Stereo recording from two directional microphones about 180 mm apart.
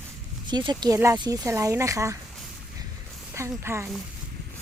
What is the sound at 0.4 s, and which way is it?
Speech, 25° right (ahead or behind).